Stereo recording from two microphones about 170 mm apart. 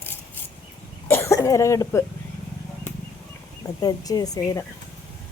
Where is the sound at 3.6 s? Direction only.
20° left (ahead or behind).